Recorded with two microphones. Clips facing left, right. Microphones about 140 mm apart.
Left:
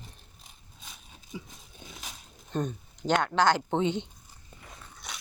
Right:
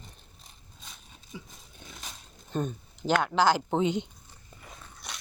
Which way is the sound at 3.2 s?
5° right (ahead or behind).